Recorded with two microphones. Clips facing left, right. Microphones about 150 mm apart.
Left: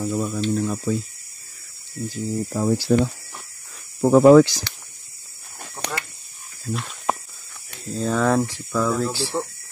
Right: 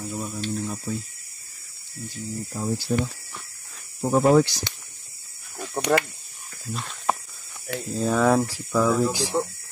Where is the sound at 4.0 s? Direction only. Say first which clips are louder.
Left 7 dB; 90° left.